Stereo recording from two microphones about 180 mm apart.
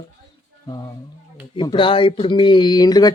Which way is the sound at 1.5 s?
30° left (ahead or behind).